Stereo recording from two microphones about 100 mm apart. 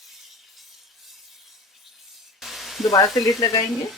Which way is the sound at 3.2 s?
40° left (ahead or behind).